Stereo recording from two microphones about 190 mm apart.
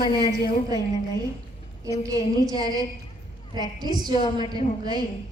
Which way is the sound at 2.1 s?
20° right (ahead or behind).